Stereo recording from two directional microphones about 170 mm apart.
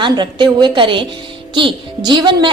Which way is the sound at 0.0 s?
25° right (ahead or behind).